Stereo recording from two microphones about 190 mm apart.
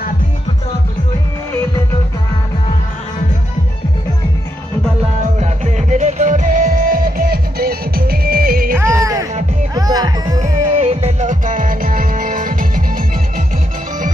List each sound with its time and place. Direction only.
5.2 s music: 40° right (ahead or behind)
8.7 s music: 15° right (ahead or behind)
10.4 s music: 35° right (ahead or behind)